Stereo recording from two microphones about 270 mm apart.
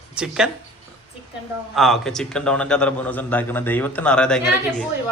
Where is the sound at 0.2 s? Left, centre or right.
Centre.